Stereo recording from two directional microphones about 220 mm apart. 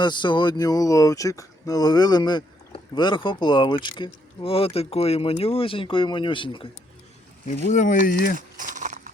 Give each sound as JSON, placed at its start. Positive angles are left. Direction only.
{"t": 0.0, "sound": "speech", "side_deg": 20}
{"t": 7.4, "sound": "speech", "side_deg": 35}
{"t": 8.4, "sound": "a sound", "side_deg": -35}